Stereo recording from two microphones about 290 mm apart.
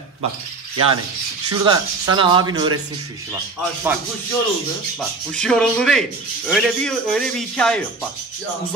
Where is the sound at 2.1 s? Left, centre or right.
Centre.